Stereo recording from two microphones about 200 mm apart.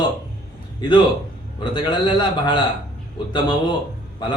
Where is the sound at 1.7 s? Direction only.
20° left (ahead or behind).